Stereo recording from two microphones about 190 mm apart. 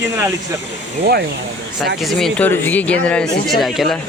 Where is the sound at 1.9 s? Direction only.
Centre (ahead or behind).